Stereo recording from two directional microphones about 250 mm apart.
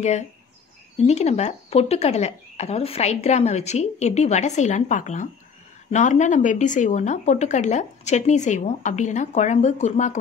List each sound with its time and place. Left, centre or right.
0.9 s speech: left